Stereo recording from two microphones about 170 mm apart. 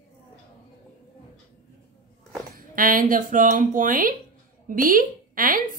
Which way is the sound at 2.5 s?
55° right (ahead or behind).